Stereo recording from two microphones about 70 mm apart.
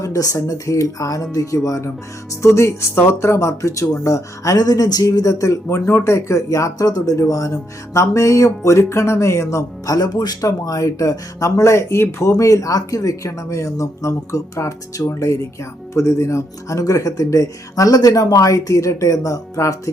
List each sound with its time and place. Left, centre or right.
0.0 s speech: left
2.6 s speech: left